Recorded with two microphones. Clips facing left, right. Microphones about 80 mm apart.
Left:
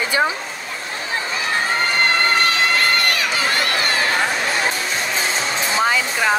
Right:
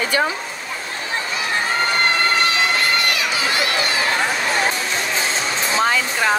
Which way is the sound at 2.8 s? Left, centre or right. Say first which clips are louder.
Left 1 dB; left.